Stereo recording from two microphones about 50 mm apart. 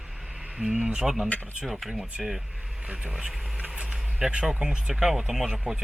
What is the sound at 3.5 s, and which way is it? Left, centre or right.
Speech, right.